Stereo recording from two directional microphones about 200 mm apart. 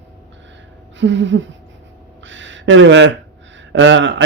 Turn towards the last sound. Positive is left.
turn(degrees=-65)  # may be behind; listen again after turning